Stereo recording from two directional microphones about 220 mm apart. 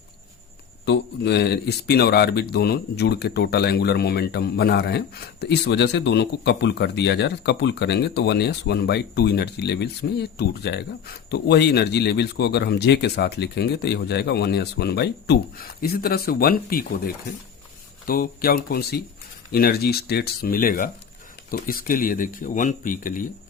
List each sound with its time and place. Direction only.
0.9 s speech: 50° left (ahead or behind)